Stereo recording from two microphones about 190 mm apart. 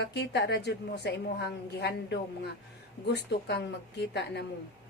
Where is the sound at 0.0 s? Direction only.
60° left (ahead or behind).